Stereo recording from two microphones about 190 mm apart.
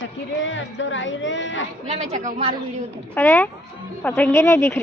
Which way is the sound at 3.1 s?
10° left (ahead or behind).